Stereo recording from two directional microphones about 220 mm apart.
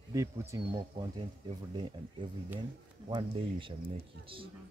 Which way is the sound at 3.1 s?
20° right (ahead or behind).